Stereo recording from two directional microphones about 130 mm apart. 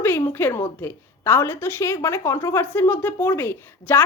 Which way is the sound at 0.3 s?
15° left (ahead or behind).